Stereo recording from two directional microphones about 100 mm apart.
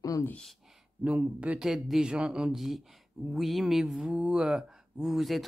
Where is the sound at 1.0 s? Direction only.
10° right (ahead or behind).